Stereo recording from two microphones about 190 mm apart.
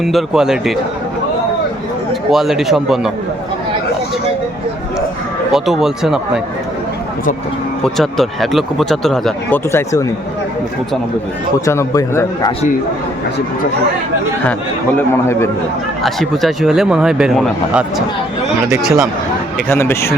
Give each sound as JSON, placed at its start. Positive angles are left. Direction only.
{"t": 0.0, "sound": "speech", "side_deg": 0}
{"t": 2.3, "sound": "speech", "side_deg": 0}
{"t": 5.5, "sound": "speech", "side_deg": 0}
{"t": 7.9, "sound": "speech", "side_deg": 0}
{"t": 9.7, "sound": "a man's voice", "side_deg": 15}
{"t": 11.6, "sound": "a man's voice", "side_deg": 15}
{"t": 14.9, "sound": "a man's voice", "side_deg": 15}
{"t": 16.0, "sound": "speech", "side_deg": 0}
{"t": 19.6, "sound": "a man's voice", "side_deg": 10}